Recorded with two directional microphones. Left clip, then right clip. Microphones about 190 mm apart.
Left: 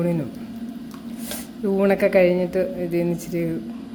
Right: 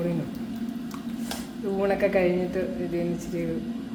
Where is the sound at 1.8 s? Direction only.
50° left (ahead or behind).